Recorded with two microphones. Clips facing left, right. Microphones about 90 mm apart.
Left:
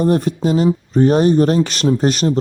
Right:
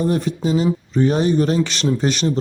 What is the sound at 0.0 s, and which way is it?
Speech, 45° left (ahead or behind).